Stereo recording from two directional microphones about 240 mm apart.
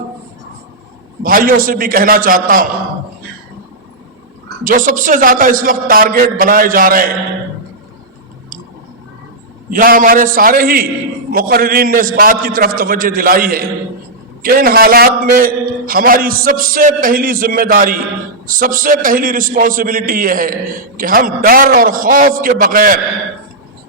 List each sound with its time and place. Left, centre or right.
1.2 s a man's voice: right
4.6 s a man's voice: right
9.6 s a man's voice: right